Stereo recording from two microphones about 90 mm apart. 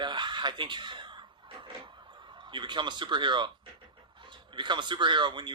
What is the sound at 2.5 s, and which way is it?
Speech, 60° right (ahead or behind).